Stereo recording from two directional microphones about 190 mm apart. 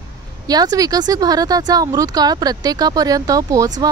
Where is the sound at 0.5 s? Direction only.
20° right (ahead or behind).